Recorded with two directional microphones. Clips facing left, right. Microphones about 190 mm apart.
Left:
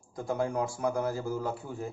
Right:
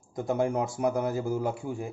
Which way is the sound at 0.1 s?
20° right (ahead or behind).